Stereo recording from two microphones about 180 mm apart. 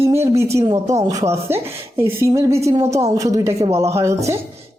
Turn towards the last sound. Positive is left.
turn(degrees=-15)  # may be behind; listen again after turning